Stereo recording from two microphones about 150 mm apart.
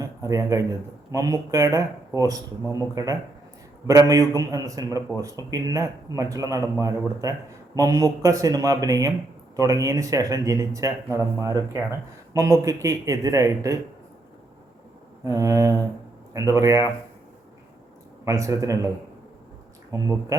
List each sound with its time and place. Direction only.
0.0 s a sound: 20° right (ahead or behind)
1.1 s speech: 20° right (ahead or behind)
15.2 s speech: 20° right (ahead or behind)
18.3 s speech: 20° right (ahead or behind)
19.9 s speech: 20° right (ahead or behind)